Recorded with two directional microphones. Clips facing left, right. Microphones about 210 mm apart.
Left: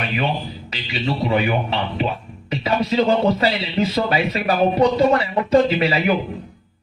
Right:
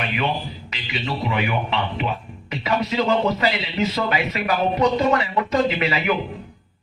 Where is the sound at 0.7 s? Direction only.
35° left (ahead or behind).